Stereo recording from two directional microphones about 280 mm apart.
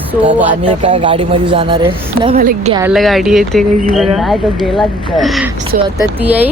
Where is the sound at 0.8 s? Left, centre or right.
Right.